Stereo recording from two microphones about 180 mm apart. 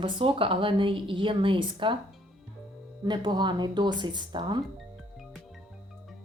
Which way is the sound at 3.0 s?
25° right (ahead or behind).